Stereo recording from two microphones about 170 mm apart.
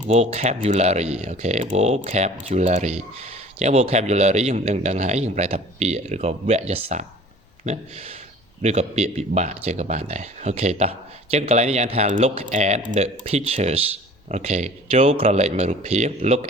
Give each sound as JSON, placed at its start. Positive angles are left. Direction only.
{"t": 0.1, "sound": "speech", "side_deg": -40}